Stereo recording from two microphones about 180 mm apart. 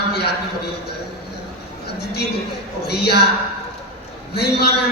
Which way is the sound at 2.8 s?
65° left (ahead or behind).